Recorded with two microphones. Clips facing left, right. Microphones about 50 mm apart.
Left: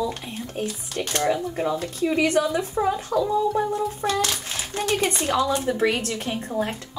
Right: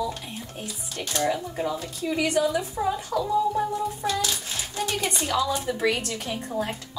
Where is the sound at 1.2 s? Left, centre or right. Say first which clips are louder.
Left 2 dB; left.